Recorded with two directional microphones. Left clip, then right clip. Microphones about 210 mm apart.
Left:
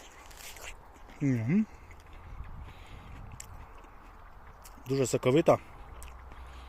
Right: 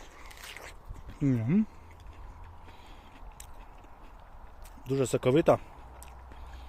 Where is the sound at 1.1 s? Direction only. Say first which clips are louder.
Right 1 dB; 5° right (ahead or behind).